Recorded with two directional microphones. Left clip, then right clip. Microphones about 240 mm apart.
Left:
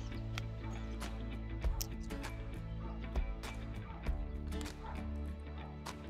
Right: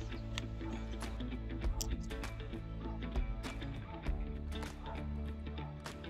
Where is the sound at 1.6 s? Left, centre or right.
Centre.